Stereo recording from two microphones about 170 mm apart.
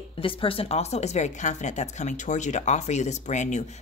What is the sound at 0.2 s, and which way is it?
Speech, 30° left (ahead or behind).